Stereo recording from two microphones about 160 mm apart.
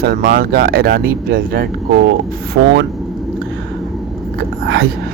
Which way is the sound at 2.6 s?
90° right.